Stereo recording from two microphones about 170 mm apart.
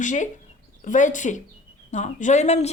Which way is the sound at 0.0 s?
45° left (ahead or behind).